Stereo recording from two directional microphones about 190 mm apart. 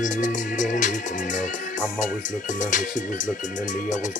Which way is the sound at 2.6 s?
40° left (ahead or behind).